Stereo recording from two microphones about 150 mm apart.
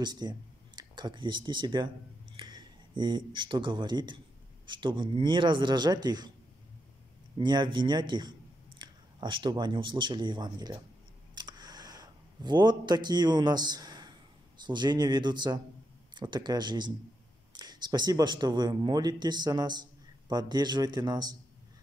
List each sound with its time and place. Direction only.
0.0 s a man's voice: 30° right (ahead or behind)
7.3 s speech: 30° right (ahead or behind)
11.3 s a sound: 30° right (ahead or behind)
14.6 s speech: 30° right (ahead or behind)